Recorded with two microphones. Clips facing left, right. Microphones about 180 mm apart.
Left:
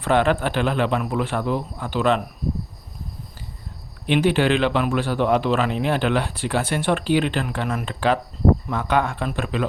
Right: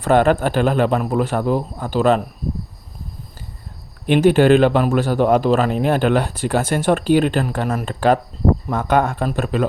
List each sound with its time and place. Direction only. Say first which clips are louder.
0.0 s a man's voice: right 4 dB; 45° right (ahead or behind)
4.0 s a man's voice: right 6 dB; 45° right (ahead or behind)